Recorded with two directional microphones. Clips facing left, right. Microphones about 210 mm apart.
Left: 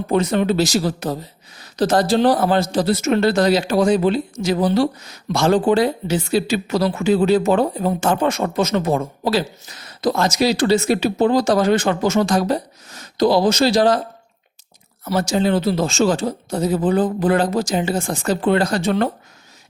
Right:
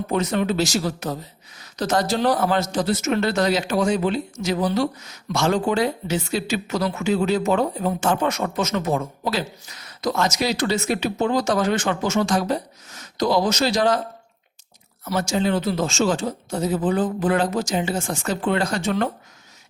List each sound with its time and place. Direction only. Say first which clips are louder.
0.1 s speech: left 5 dB; 30° left (ahead or behind)
15.0 s speech: left 4 dB; 35° left (ahead or behind)